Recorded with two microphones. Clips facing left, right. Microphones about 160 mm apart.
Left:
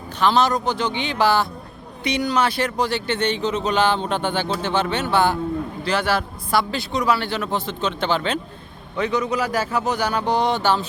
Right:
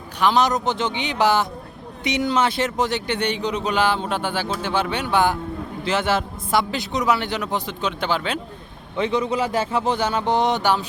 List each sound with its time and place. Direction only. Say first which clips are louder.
0.2 s a man's voice: even; 15° right (ahead or behind)
9.0 s a man's voice: right 1 dB; 30° right (ahead or behind)